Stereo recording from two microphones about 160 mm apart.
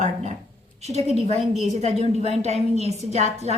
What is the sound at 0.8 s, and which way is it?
A woman's voice, 40° right (ahead or behind).